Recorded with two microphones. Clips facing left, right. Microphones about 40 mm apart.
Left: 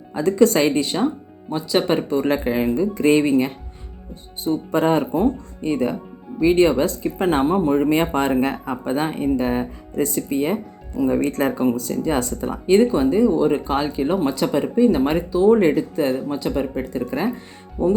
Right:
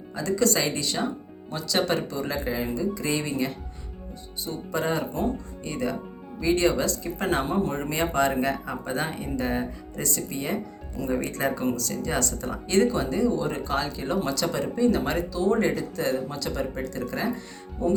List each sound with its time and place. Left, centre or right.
0.1 s speech: left
2.1 s speech: left
5.1 s speech: left
10.9 s speech: centre
11.2 s speech: left
11.5 s speech: centre
11.8 s speech: left